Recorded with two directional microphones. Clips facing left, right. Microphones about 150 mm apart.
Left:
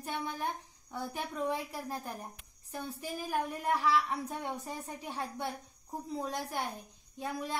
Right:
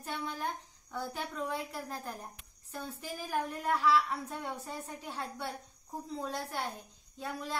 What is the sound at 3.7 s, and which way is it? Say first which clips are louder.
A woman's voice: right 1 dB; 15° left (ahead or behind).